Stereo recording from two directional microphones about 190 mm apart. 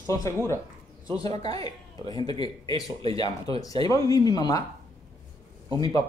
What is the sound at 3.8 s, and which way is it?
Speech, 20° left (ahead or behind).